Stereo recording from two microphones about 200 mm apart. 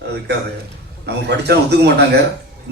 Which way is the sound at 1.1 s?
55° right (ahead or behind).